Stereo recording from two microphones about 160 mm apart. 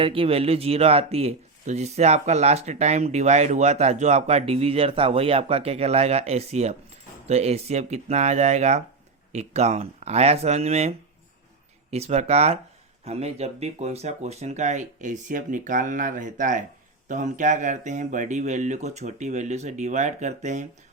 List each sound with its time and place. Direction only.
0.0 s speech: 35° right (ahead or behind)